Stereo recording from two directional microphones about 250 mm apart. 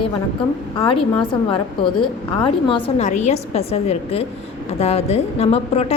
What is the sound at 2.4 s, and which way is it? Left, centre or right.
A woman's voice, left.